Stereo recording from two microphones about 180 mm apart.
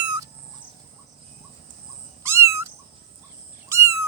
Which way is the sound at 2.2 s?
15° right (ahead or behind).